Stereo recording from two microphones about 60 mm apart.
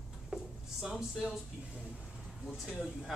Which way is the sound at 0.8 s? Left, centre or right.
Centre.